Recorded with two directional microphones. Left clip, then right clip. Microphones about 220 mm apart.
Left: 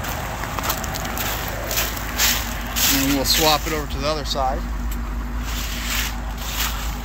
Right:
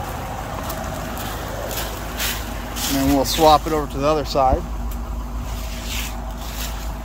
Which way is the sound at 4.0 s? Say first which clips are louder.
Right 6 dB; 40° right (ahead or behind).